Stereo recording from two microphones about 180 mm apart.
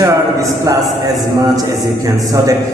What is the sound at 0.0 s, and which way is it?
A man's voice, 20° right (ahead or behind).